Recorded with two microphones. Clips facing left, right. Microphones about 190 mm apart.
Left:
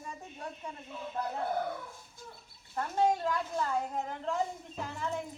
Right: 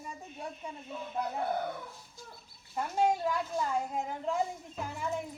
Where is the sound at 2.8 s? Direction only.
10° right (ahead or behind).